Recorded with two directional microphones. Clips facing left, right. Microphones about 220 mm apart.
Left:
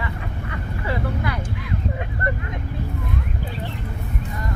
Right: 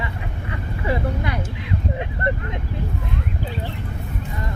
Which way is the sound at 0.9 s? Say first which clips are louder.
Right 2 dB; 25° right (ahead or behind).